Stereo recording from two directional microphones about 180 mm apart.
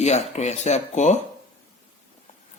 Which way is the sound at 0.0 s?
40° left (ahead or behind).